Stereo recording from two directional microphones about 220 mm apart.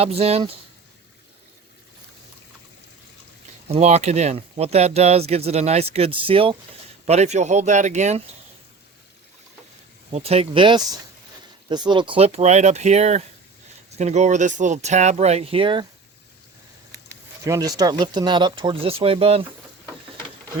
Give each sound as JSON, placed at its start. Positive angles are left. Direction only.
{"t": 0.0, "sound": "speech", "side_deg": -25}
{"t": 3.7, "sound": "speech", "side_deg": -30}
{"t": 10.1, "sound": "speech", "side_deg": -25}
{"t": 17.4, "sound": "speech", "side_deg": -15}